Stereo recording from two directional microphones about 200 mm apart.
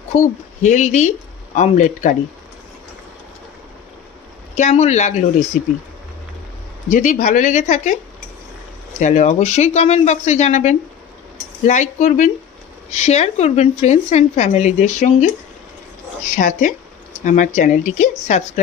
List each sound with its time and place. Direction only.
0.1 s a woman's voice: 35° left (ahead or behind)
4.6 s a woman's voice: 35° left (ahead or behind)
6.9 s a woman's voice: 40° left (ahead or behind)
9.0 s a woman's voice: 35° left (ahead or behind)
16.3 s a woman's voice: 40° left (ahead or behind)